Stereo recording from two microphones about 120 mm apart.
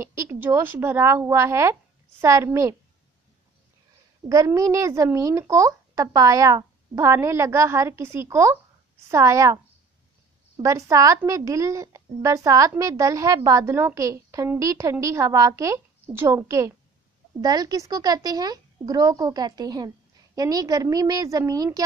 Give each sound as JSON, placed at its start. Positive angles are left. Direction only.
{"t": 0.0, "sound": "a woman's voice", "side_deg": -25}
{"t": 4.2, "sound": "a woman's voice", "side_deg": -5}
{"t": 4.6, "sound": "speech", "side_deg": -25}
{"t": 10.6, "sound": "speech", "side_deg": -25}